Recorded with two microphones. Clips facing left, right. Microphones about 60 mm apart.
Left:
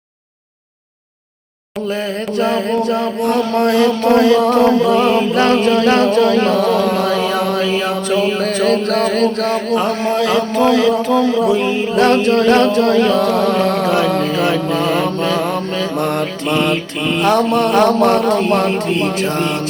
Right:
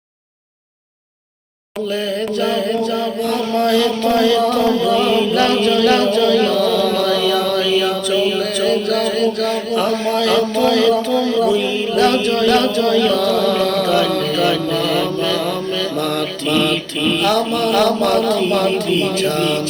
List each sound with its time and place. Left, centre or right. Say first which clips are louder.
2.3 s speech: left 4 dB; left
9.7 s speech: even; left